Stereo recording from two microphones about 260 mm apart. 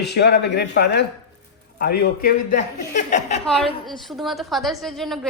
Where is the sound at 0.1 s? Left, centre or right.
Left.